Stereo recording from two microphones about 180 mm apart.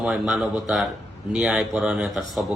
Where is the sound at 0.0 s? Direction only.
5° right (ahead or behind).